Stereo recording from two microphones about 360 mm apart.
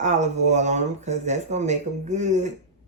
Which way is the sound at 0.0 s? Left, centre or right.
Centre.